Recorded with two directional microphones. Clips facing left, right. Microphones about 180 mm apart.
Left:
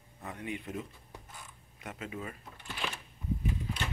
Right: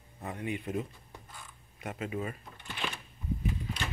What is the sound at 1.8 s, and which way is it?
Speech, 50° right (ahead or behind).